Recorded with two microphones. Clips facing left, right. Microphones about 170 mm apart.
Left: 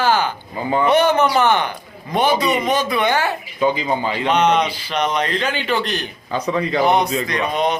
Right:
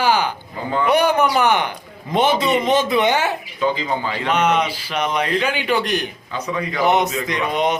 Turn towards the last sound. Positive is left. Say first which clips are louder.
# even
turn(degrees=-20)  # may be behind; listen again after turning